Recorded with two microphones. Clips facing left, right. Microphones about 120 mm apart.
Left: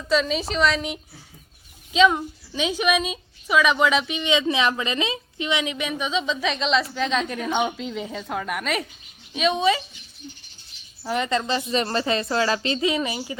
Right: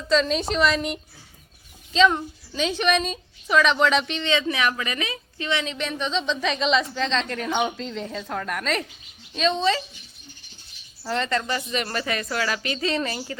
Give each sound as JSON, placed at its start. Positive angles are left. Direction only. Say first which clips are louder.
{"t": 0.1, "sound": "a woman's voice", "louder": "right 1 dB", "side_deg": 5}
{"t": 11.0, "sound": "speech", "louder": "left 1 dB", "side_deg": 15}
{"t": 11.7, "sound": "speech", "louder": "left 6 dB", "side_deg": 30}
{"t": 12.8, "sound": "a woman's voice", "louder": "left 2 dB", "side_deg": 10}